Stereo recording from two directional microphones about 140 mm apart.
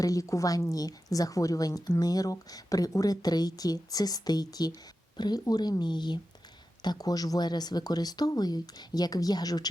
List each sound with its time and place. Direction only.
0.0 s a woman's voice: 25° left (ahead or behind)